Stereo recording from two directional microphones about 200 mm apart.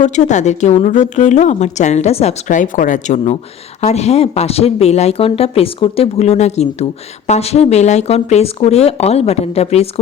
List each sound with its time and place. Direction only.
0.0 s a woman's voice: 35° left (ahead or behind)